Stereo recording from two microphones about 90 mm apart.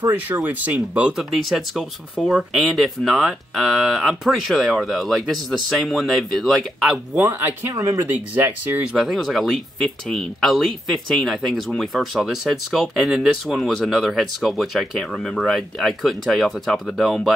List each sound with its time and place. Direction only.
0.0 s speech: 20° right (ahead or behind); by 7.0 s 5° right (ahead or behind)
7.2 s speech: 25° right (ahead or behind)
7.7 s speech: 35° right (ahead or behind)
8.4 s speech: 25° right (ahead or behind)
8.8 s speech: 5° right (ahead or behind)